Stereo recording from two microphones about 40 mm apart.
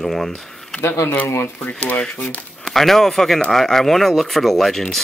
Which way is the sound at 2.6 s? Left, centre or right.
Centre.